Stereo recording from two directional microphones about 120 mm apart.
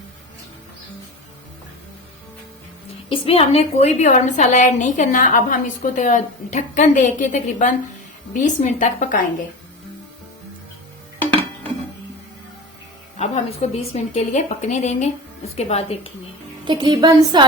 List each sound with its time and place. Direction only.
3.1 s a woman's voice: 55° left (ahead or behind); by 9.1 s 90° left
13.1 s a woman's voice: 70° left (ahead or behind)
15.5 s a woman's voice: 60° left (ahead or behind)
16.6 s a woman's voice: 40° right (ahead or behind)